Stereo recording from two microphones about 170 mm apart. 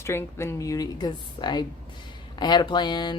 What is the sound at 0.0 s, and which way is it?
A woman's voice, 15° left (ahead or behind).